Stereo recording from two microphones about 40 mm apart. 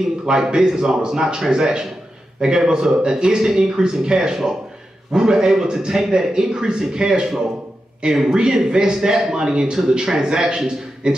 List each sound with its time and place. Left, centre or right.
0.3 s a man's voice: centre